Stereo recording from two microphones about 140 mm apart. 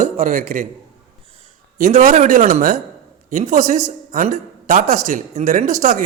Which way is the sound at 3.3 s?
60° right (ahead or behind).